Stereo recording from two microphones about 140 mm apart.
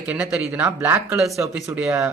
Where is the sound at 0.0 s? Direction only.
10° right (ahead or behind).